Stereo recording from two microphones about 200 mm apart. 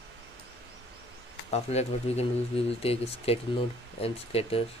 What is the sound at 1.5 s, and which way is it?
Speech, 30° left (ahead or behind).